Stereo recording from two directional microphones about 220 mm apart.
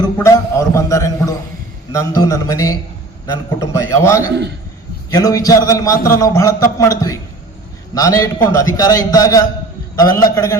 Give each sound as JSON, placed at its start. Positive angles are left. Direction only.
{"t": 0.0, "sound": "a man's voice", "side_deg": 15}